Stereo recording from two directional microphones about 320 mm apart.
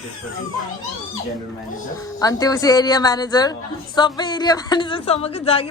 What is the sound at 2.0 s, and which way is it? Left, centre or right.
A woman's voice, centre.